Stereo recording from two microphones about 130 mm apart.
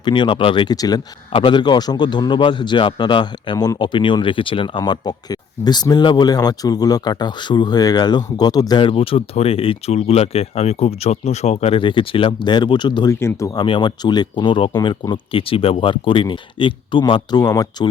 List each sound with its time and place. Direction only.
0.0 s a man's voice: 35° left (ahead or behind)
13.1 s a man's voice: 20° left (ahead or behind)